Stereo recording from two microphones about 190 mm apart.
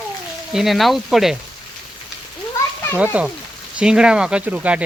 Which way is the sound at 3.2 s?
5° right (ahead or behind).